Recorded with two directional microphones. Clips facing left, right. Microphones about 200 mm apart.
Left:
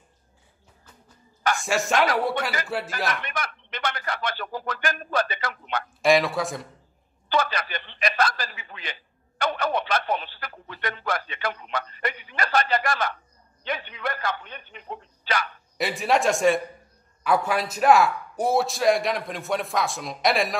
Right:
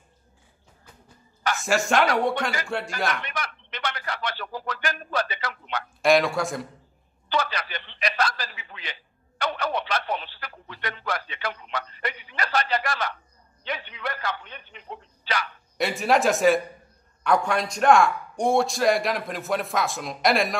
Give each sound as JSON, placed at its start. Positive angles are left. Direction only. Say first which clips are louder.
{"t": 1.6, "sound": "a man's voice", "louder": "right 2 dB", "side_deg": 0}
{"t": 3.3, "sound": "a sound", "louder": "left 1 dB", "side_deg": 50}
{"t": 6.0, "sound": "a man's voice", "louder": "even", "side_deg": 0}
{"t": 7.2, "sound": "a sound", "louder": "left 2 dB", "side_deg": 50}
{"t": 13.7, "sound": "a man's voice", "louder": "left 2 dB", "side_deg": 50}
{"t": 15.8, "sound": "a man's voice", "louder": "right 1 dB", "side_deg": 0}